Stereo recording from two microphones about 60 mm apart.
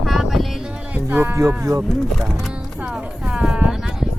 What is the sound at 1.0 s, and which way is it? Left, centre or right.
Music, right.